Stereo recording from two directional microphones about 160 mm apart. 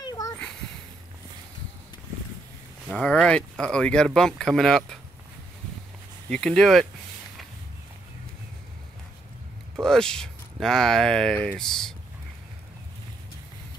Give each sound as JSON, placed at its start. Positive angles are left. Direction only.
{"t": 0.0, "sound": "a sound", "side_deg": 25}
{"t": 2.9, "sound": "speech", "side_deg": 5}
{"t": 6.2, "sound": "speech", "side_deg": 5}
{"t": 9.8, "sound": "speech", "side_deg": 5}